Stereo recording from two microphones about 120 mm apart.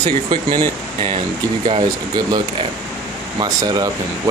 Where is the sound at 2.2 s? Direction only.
35° right (ahead or behind).